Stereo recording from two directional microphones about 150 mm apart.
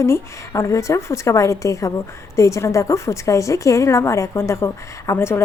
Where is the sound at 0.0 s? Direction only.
20° left (ahead or behind).